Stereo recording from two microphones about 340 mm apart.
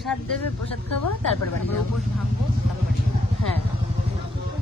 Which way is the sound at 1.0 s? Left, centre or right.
Left.